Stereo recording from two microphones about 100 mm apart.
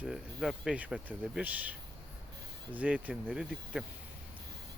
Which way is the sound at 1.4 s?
15° right (ahead or behind).